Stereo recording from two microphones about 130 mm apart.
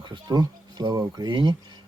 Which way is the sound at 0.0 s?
35° right (ahead or behind).